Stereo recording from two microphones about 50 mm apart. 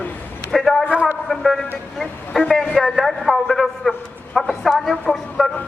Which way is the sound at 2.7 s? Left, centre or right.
Centre.